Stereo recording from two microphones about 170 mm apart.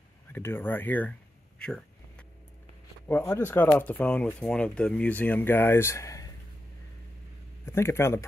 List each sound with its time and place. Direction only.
0.3 s speech: 15° left (ahead or behind)
1.6 s a sound: 5° left (ahead or behind)
3.1 s speech: 15° left (ahead or behind)
7.6 s speech: 15° left (ahead or behind)